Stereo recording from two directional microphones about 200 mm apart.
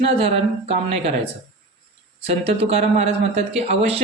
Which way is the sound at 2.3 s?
30° right (ahead or behind).